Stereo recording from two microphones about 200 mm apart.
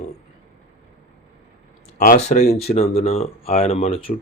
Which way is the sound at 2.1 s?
30° left (ahead or behind).